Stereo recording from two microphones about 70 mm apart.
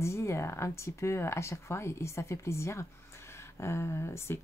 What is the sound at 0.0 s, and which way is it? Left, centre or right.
Speech, left.